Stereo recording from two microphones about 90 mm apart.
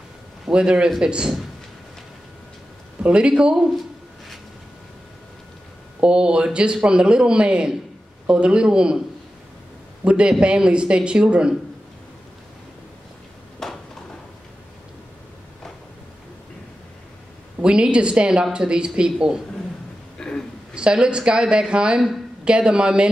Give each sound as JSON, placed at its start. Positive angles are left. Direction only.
{"t": 0.5, "sound": "a woman's voice", "side_deg": -10}
{"t": 3.0, "sound": "a woman's voice", "side_deg": -10}
{"t": 5.9, "sound": "a woman's voice", "side_deg": -10}
{"t": 10.0, "sound": "a man's voice", "side_deg": -10}
{"t": 13.6, "sound": "a sound", "side_deg": 5}
{"t": 17.6, "sound": "a woman's voice", "side_deg": -10}
{"t": 20.2, "sound": "a sound", "side_deg": 10}
{"t": 20.7, "sound": "a woman's voice", "side_deg": -10}